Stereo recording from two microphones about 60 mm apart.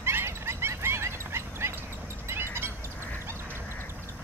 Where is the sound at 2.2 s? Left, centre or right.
Right.